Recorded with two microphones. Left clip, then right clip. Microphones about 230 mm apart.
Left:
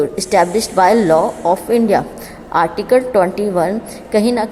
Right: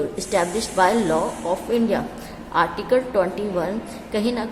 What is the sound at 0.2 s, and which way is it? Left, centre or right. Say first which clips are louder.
A woman's voice: left 8 dB; left.